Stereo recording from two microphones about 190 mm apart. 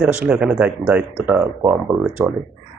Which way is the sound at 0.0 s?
5° right (ahead or behind).